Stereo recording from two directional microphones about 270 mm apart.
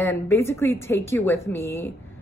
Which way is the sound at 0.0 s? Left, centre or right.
Centre.